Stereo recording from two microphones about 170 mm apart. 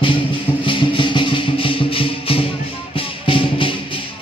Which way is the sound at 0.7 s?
30° left (ahead or behind).